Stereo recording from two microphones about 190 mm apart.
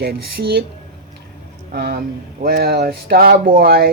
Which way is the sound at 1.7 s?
55° right (ahead or behind).